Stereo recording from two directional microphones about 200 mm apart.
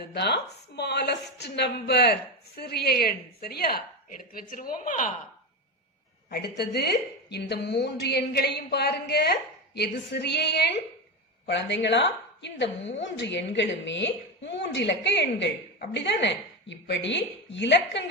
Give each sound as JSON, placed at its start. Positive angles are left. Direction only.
{"t": 0.1, "sound": "a woman's voice", "side_deg": 55}
{"t": 6.6, "sound": "a woman's voice", "side_deg": 55}